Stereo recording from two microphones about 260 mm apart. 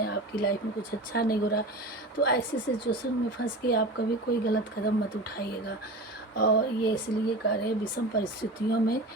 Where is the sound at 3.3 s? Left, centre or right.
Left.